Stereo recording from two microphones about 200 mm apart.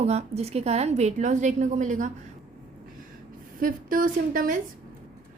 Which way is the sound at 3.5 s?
45° right (ahead or behind).